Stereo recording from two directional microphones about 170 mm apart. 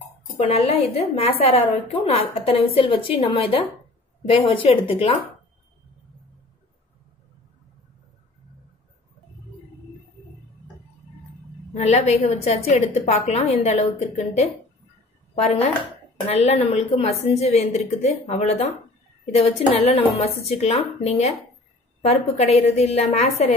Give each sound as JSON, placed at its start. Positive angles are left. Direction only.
{"t": 0.4, "sound": "a woman's voice", "side_deg": 35}
{"t": 11.7, "sound": "a woman's voice", "side_deg": 40}